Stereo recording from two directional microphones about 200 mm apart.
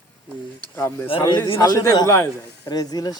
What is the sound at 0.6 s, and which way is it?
Speech, 10° left (ahead or behind).